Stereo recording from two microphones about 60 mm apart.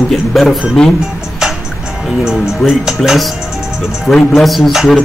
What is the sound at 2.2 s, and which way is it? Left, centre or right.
Speech, centre.